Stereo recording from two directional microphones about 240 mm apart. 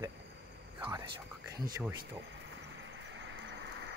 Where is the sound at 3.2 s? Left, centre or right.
Right.